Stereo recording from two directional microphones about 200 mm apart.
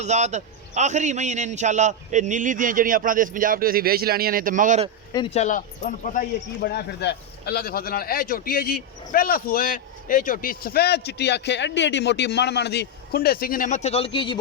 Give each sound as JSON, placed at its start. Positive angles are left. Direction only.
{"t": 0.0, "sound": "a man's voice", "side_deg": -35}
{"t": 5.1, "sound": "speech", "side_deg": 30}